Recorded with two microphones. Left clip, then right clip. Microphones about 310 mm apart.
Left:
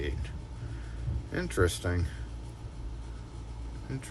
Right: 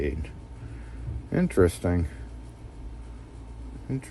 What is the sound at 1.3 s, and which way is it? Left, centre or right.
Speech, centre.